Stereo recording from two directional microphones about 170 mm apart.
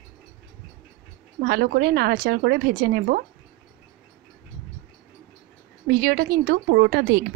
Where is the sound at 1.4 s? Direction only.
65° right (ahead or behind).